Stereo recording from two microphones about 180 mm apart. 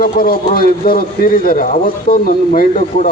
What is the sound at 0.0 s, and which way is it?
A man's voice, 55° left (ahead or behind).